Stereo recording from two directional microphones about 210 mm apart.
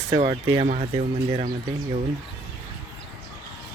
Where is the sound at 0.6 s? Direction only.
35° right (ahead or behind).